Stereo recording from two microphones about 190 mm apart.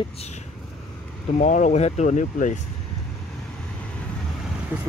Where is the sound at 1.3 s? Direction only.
40° left (ahead or behind).